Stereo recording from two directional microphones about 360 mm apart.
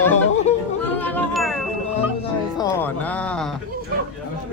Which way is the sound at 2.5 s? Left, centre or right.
Centre.